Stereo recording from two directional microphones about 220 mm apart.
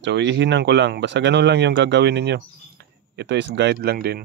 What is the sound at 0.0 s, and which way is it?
Speech, 55° right (ahead or behind).